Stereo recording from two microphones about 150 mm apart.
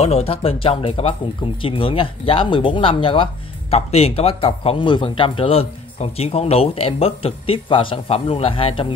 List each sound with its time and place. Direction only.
0.0 s speech: 40° left (ahead or behind)